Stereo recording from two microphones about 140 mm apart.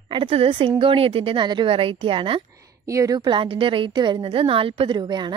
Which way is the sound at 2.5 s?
25° right (ahead or behind).